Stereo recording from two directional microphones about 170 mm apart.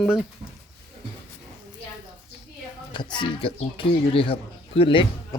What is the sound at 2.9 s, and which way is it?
Speech, 25° left (ahead or behind).